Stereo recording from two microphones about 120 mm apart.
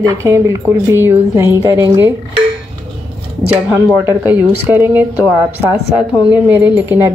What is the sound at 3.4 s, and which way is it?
Speech, 15° right (ahead or behind).